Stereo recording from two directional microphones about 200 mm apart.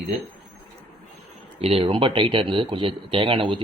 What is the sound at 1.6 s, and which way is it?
Speech, 30° right (ahead or behind).